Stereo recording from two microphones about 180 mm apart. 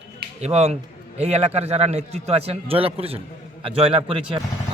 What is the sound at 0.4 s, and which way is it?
A man's voice, 35° right (ahead or behind).